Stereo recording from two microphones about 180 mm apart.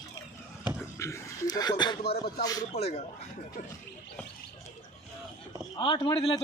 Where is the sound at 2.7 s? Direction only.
35° left (ahead or behind).